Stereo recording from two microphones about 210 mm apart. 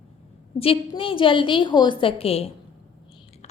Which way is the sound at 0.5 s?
25° left (ahead or behind).